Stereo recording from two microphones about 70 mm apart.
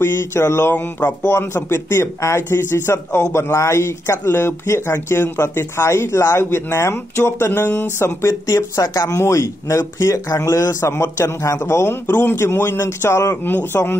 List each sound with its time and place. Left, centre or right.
0.0 s speech: left
0.7 s speech: left
8.3 s speech: left